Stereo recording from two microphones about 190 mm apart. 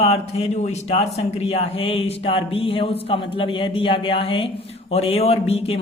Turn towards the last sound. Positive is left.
turn(degrees=30)  # may be behind; listen again after turning